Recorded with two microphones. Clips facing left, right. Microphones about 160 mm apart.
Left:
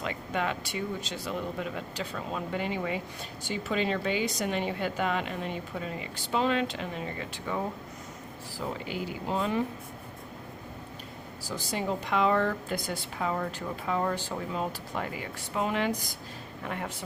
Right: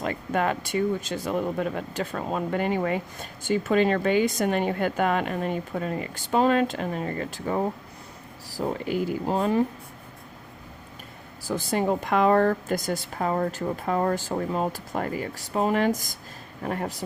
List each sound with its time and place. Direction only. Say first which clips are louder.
0.0 s speech: right 6 dB; 45° right (ahead or behind)
11.4 s speech: right 7 dB; 50° right (ahead or behind)